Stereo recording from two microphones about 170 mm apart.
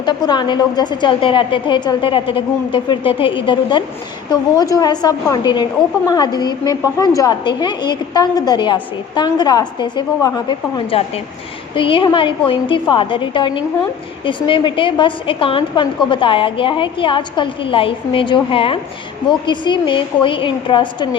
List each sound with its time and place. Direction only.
0.0 s a woman's voice: 25° left (ahead or behind)